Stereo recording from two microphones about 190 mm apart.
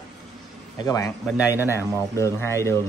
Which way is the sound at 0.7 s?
20° left (ahead or behind).